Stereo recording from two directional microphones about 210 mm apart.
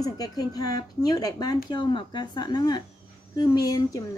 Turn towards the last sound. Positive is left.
turn(degrees=15)  # may be behind; listen again after turning